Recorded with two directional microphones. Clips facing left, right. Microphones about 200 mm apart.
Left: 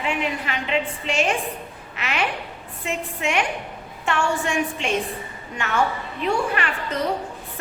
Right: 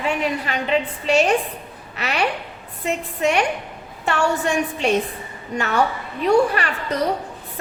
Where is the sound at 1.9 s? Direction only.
40° right (ahead or behind).